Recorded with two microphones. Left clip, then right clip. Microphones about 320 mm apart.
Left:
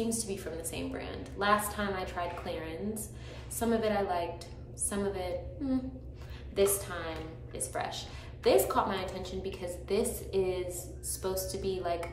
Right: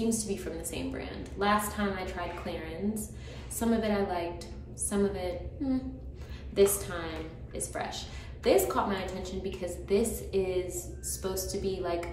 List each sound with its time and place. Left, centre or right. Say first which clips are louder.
0.3 s a woman's voice: right 2 dB; centre